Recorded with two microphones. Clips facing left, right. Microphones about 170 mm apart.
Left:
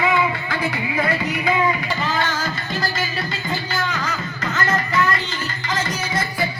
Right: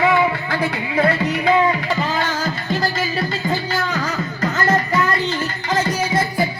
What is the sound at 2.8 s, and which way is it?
Music, 35° right (ahead or behind).